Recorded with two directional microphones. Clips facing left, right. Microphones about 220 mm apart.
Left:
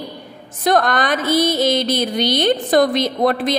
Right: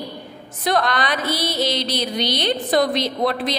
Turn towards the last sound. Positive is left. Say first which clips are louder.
# left 4 dB
turn(degrees=50)  # may be behind; listen again after turning